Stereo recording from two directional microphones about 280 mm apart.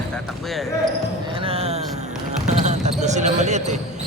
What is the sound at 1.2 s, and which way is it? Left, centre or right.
Basketball bounce, centre.